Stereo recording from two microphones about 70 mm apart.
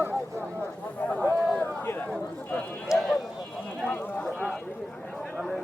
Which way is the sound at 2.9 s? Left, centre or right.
Centre.